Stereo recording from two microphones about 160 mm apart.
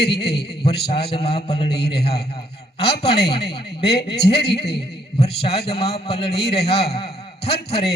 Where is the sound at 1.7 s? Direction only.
90° left.